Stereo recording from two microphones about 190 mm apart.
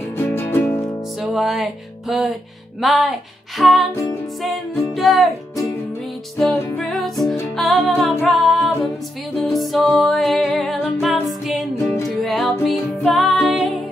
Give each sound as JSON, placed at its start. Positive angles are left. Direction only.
{"t": 0.2, "sound": "music", "side_deg": 10}
{"t": 1.2, "sound": "music", "side_deg": 0}
{"t": 3.9, "sound": "music", "side_deg": 15}
{"t": 4.9, "sound": "music", "side_deg": 0}